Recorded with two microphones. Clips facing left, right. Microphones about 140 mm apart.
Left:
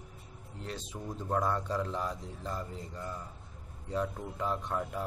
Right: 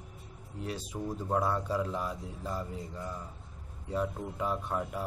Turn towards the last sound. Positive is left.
turn(degrees=-5)  # may be behind; listen again after turning